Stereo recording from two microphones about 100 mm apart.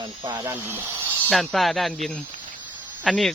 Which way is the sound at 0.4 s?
25° right (ahead or behind).